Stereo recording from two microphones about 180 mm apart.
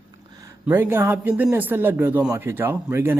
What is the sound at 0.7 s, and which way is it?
Speech, 15° right (ahead or behind).